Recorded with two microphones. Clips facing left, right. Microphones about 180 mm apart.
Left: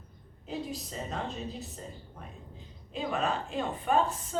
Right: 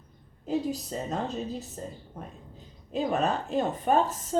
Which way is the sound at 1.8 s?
45° right (ahead or behind).